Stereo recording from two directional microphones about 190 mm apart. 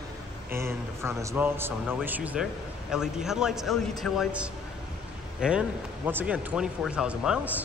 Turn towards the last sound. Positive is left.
turn(degrees=-5)  # may be behind; listen again after turning